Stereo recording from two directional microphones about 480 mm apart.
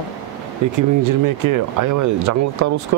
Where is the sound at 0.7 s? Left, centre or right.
Right.